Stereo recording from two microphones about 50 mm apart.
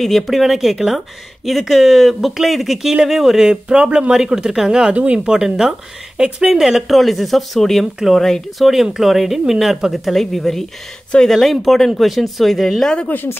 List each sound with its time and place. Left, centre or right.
0.0 s speech: centre
4.9 s speech: right
5.2 s speech: centre
8.2 s speech: centre
8.6 s speech: centre
13.1 s speech: left